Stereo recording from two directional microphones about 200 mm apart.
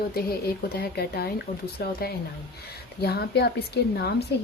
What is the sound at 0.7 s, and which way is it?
A woman's voice, 50° left (ahead or behind).